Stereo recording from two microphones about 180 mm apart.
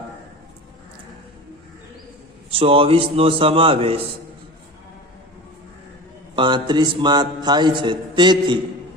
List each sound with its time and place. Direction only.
2.5 s a man's voice: 30° right (ahead or behind)
6.3 s a man's voice: 25° right (ahead or behind)